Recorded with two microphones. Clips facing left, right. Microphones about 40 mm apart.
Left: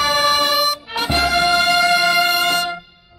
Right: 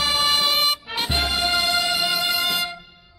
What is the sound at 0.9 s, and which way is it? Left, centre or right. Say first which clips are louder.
Music: left 4 dB; centre.